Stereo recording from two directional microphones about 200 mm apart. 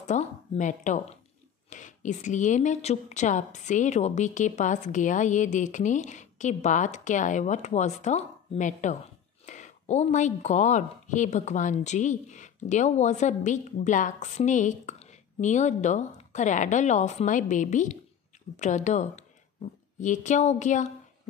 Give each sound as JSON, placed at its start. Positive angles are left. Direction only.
{"t": 0.0, "sound": "a woman's voice", "side_deg": 35}